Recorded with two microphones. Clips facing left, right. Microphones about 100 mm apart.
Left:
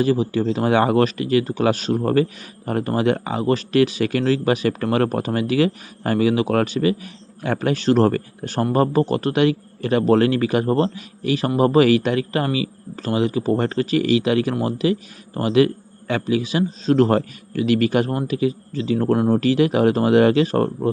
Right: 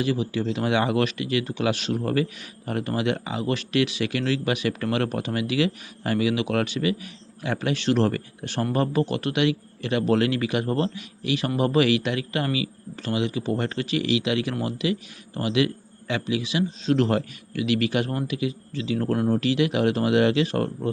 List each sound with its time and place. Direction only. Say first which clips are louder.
0.0 s speech: left 6 dB; 40° left (ahead or behind)